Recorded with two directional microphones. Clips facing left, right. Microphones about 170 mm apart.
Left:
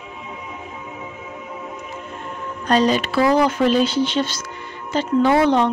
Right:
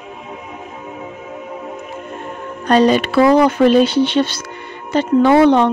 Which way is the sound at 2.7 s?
60° right (ahead or behind).